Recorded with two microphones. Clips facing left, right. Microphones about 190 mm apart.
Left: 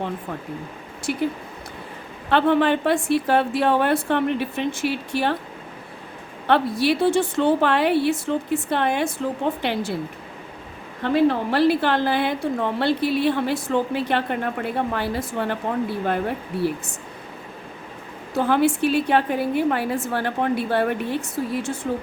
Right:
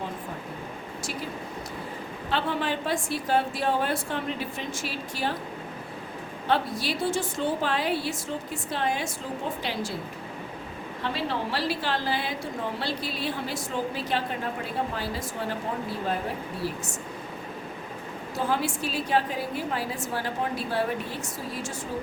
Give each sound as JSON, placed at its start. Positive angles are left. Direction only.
{"t": 1.1, "sound": "a woman's voice", "side_deg": 65}
{"t": 2.3, "sound": "a woman's voice", "side_deg": 65}
{"t": 6.5, "sound": "a woman's voice", "side_deg": 65}
{"t": 11.0, "sound": "a woman's voice", "side_deg": 50}
{"t": 18.3, "sound": "a woman's voice", "side_deg": 60}